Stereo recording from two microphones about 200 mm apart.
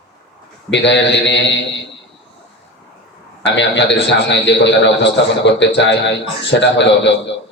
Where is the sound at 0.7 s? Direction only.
60° left (ahead or behind).